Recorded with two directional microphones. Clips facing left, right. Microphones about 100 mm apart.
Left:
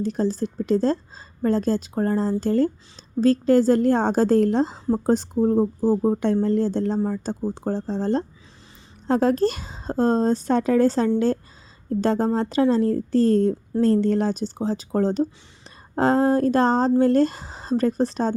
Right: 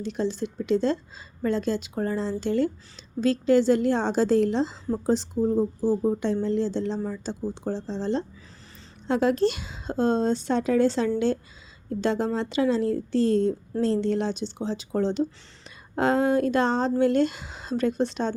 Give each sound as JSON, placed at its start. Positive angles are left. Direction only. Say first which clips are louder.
{"t": 0.0, "sound": "a woman's voice", "louder": "left 4 dB", "side_deg": 40}